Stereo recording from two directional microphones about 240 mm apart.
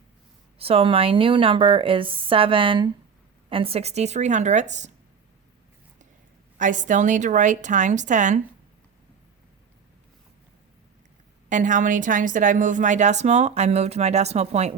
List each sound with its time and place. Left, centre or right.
0.6 s a woman's voice: right
6.6 s a woman's voice: right
11.4 s a woman's voice: right